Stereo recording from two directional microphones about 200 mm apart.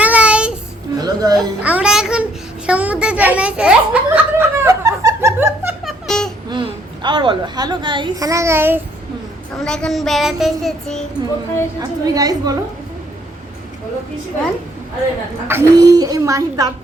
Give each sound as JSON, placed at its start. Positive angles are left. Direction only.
{"t": 0.0, "sound": "child singing", "side_deg": -5}
{"t": 0.9, "sound": "music", "side_deg": -20}
{"t": 1.4, "sound": "music", "side_deg": -5}
{"t": 2.6, "sound": "a sound", "side_deg": -5}
{"t": 5.8, "sound": "music", "side_deg": 0}
{"t": 6.5, "sound": "a woman's voice", "side_deg": -25}
{"t": 9.6, "sound": "child singing", "side_deg": 5}
{"t": 11.8, "sound": "a woman's voice", "side_deg": -20}
{"t": 15.4, "sound": "speech", "side_deg": -15}